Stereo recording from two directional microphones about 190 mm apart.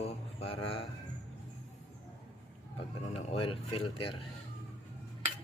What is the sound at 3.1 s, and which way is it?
Speech, 30° left (ahead or behind).